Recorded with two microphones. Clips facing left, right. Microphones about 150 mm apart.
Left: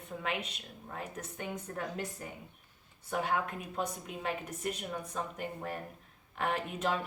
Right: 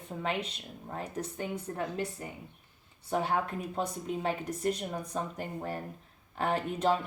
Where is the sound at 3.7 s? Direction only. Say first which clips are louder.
Right 3 dB; 35° right (ahead or behind).